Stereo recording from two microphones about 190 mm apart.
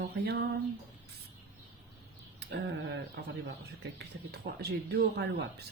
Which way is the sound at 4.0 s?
55° right (ahead or behind).